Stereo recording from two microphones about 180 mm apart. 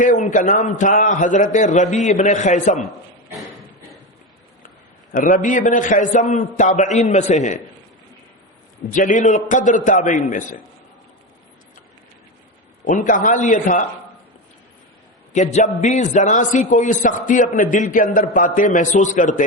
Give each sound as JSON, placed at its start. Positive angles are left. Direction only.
{"t": 0.0, "sound": "a man's voice", "side_deg": 45}
{"t": 5.1, "sound": "a man's voice", "side_deg": 50}
{"t": 8.9, "sound": "a man's voice", "side_deg": 45}
{"t": 12.8, "sound": "a man's voice", "side_deg": 45}
{"t": 15.3, "sound": "a man's voice", "side_deg": 40}